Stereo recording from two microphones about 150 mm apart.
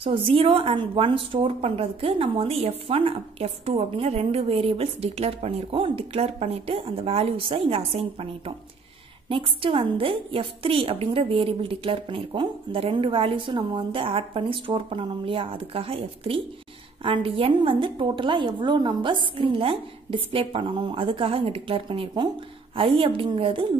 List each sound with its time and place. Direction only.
0.0 s a woman's voice: 35° right (ahead or behind)